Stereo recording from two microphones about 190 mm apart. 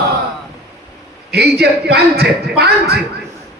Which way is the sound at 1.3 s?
60° right (ahead or behind).